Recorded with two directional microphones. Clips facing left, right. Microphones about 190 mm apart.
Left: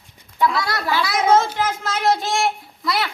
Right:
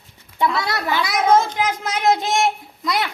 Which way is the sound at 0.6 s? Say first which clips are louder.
Even; 20° right (ahead or behind).